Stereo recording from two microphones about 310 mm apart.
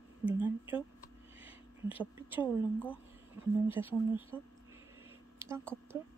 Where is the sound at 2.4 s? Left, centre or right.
Centre.